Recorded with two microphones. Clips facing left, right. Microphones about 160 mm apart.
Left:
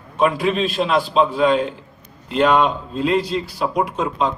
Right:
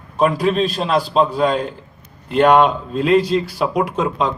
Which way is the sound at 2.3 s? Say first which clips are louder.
Right 3 dB; 55° right (ahead or behind).